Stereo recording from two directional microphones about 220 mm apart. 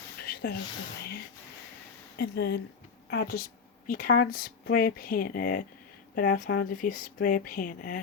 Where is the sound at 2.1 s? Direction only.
45° left (ahead or behind).